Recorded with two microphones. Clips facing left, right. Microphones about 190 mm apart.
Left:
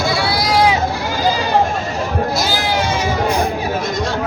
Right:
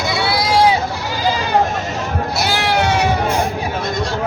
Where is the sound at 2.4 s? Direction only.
65° right (ahead or behind).